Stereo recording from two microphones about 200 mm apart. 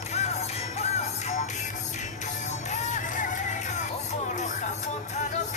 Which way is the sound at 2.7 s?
35° left (ahead or behind).